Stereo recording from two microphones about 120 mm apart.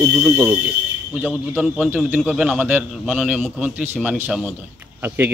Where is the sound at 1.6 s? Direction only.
10° right (ahead or behind).